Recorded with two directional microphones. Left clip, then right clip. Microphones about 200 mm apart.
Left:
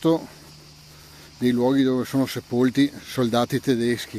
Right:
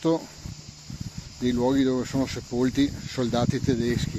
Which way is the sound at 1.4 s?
35° left (ahead or behind).